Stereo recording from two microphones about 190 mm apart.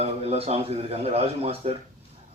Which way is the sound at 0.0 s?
35° right (ahead or behind).